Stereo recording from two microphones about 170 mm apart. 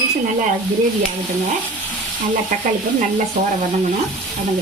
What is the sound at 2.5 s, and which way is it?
Speech, 45° right (ahead or behind).